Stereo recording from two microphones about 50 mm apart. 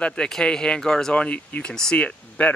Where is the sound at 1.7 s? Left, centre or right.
Centre.